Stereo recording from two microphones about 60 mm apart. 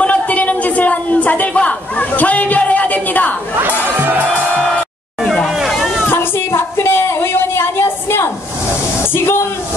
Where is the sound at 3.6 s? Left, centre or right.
Right.